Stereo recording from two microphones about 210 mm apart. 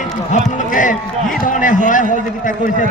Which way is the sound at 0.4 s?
35° left (ahead or behind).